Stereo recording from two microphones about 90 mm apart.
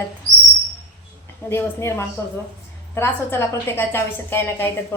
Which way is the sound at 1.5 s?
30° left (ahead or behind).